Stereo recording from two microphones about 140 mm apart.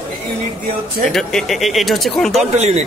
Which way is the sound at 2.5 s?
50° right (ahead or behind).